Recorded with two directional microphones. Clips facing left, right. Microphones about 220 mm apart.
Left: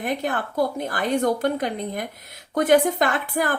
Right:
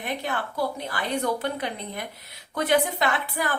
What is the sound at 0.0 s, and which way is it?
A woman's voice, 45° left (ahead or behind).